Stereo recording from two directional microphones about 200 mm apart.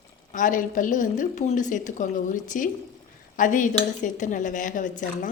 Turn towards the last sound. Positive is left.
turn(degrees=40)  # may be behind; listen again after turning